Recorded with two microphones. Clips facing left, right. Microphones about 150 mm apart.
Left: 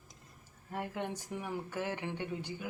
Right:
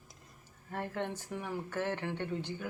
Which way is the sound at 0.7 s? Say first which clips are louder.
Right 1 dB; 15° left (ahead or behind).